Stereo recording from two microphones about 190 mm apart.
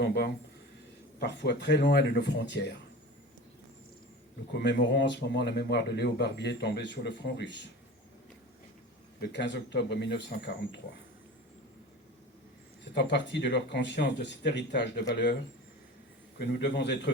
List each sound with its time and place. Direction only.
0.0 s speech: 55° left (ahead or behind)
4.5 s speech: 65° left (ahead or behind)
9.2 s speech: 65° left (ahead or behind)
12.9 s speech: 65° left (ahead or behind)
16.6 s speech: 65° left (ahead or behind)